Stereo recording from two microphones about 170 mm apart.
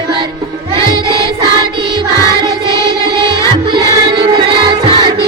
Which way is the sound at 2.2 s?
20° left (ahead or behind).